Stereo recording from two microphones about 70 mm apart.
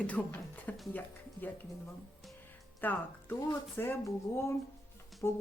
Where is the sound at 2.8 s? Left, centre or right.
Left.